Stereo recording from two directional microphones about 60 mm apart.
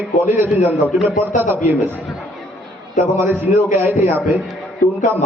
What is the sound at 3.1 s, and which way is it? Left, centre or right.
Speech, right.